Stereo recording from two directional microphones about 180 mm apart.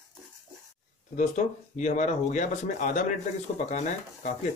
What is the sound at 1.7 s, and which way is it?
Speech, 40° left (ahead or behind).